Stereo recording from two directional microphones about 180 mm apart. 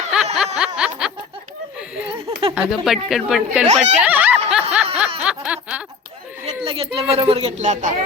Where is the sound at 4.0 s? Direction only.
10° right (ahead or behind).